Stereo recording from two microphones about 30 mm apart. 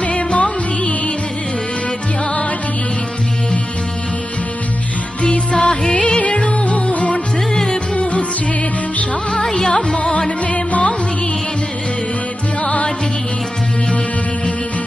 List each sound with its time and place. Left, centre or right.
0.0 s music: left
5.2 s music: left
6.2 s music: left
7.5 s music: left
9.7 s music: left
10.1 s music: left
12.6 s music: left